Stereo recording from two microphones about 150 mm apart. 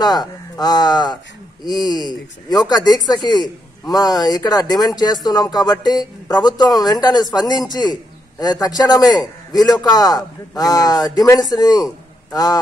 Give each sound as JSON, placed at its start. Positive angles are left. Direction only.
{"t": 0.0, "sound": "a man's voice", "side_deg": 25}